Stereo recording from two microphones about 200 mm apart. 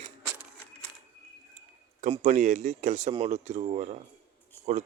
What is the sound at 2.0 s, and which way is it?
Speech, 40° right (ahead or behind).